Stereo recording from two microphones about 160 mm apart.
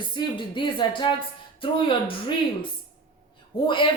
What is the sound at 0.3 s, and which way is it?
Speech, 30° left (ahead or behind).